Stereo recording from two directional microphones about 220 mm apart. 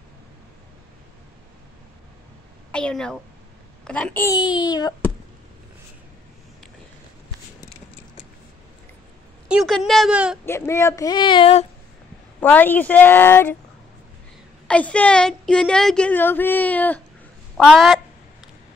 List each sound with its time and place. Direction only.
2.7 s a woman's voice: 5° left (ahead or behind)
9.5 s a woman's voice: centre (ahead or behind)
10.4 s speech: 10° left (ahead or behind)
12.4 s speech: 10° left (ahead or behind)
14.7 s a woman's voice: 5° left (ahead or behind)
17.6 s a sound: centre (ahead or behind)